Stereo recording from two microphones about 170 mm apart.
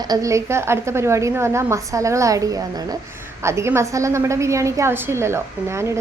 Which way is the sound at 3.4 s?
15° right (ahead or behind).